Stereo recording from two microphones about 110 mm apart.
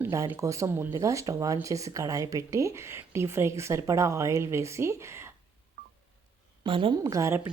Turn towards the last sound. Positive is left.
turn(degrees=-25)  # may be behind; listen again after turning